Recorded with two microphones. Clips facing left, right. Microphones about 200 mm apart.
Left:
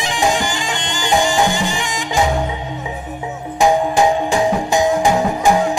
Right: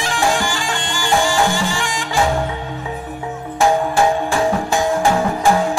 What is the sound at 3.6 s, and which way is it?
Music, 15° left (ahead or behind).